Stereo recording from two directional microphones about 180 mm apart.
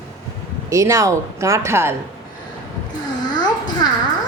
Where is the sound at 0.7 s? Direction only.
15° right (ahead or behind).